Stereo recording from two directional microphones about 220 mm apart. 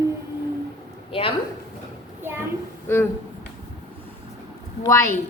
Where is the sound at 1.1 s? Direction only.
25° left (ahead or behind).